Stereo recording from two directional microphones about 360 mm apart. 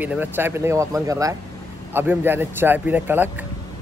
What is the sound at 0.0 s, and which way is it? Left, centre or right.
Speech, centre.